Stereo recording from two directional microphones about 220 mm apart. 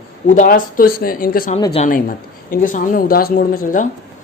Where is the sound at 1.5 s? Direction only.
25° left (ahead or behind).